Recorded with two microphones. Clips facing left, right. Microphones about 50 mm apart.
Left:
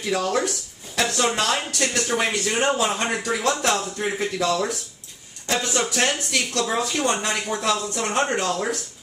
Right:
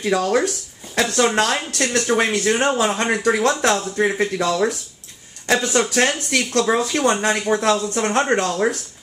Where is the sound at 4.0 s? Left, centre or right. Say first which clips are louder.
Right 5 dB; right.